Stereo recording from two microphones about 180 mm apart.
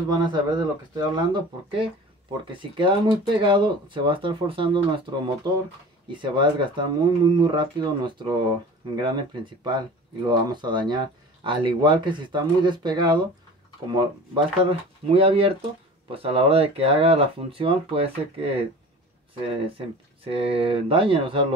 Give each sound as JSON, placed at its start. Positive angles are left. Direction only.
{"t": 0.1, "sound": "speech", "side_deg": -20}
{"t": 20.2, "sound": "speech", "side_deg": -30}